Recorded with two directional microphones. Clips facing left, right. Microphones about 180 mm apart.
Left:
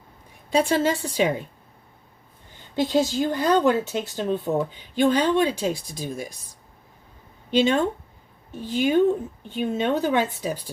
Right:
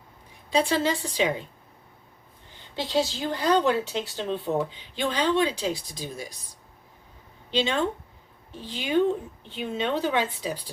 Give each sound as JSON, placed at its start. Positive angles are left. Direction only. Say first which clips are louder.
{"t": 0.5, "sound": "speech", "louder": "left 3 dB", "side_deg": 50}
{"t": 2.7, "sound": "speech", "louder": "left 5 dB", "side_deg": 50}
{"t": 7.5, "sound": "speech", "louder": "left 5 dB", "side_deg": 45}